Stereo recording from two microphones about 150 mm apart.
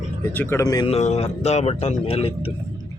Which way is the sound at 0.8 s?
45° left (ahead or behind).